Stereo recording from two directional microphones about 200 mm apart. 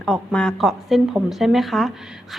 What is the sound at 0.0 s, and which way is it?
A woman's voice, 5° left (ahead or behind).